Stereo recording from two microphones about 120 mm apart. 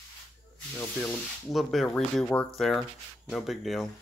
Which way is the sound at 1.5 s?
Centre (ahead or behind).